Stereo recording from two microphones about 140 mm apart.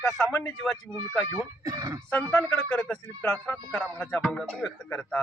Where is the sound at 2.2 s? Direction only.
5° left (ahead or behind).